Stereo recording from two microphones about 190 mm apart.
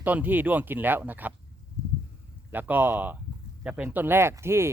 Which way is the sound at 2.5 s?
10° right (ahead or behind).